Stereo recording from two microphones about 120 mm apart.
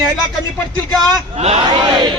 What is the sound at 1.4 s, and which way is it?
Speech, 60° right (ahead or behind).